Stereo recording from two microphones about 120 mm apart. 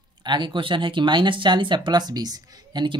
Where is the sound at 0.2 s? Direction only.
40° right (ahead or behind).